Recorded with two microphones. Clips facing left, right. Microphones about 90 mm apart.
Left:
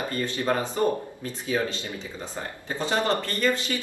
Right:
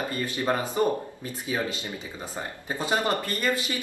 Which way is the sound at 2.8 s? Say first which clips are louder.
Left 1 dB; 15° right (ahead or behind).